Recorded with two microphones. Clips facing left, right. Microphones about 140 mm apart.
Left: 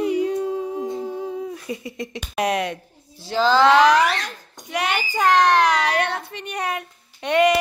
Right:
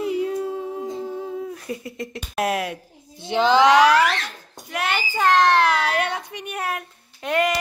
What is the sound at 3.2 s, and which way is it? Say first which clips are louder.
Speech: even; 20° right (ahead or behind).